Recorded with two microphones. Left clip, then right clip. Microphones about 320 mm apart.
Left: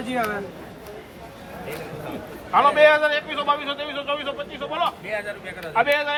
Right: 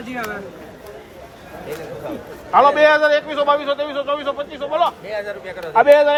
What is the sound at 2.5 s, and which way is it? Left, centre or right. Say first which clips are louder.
Speech: right 3 dB; right.